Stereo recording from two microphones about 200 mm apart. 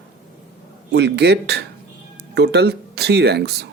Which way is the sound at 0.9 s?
60° right (ahead or behind).